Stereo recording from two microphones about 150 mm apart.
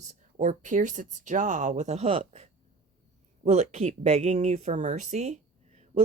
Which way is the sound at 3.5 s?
50° right (ahead or behind).